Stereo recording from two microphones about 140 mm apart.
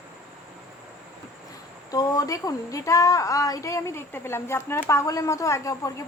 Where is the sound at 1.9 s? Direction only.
25° left (ahead or behind).